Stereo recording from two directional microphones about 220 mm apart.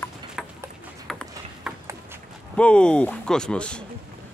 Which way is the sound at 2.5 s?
5° left (ahead or behind).